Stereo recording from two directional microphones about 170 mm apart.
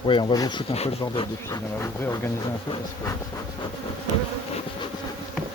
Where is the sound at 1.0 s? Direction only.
25° left (ahead or behind).